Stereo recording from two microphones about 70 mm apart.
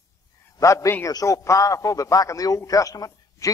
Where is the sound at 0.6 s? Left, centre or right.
Left.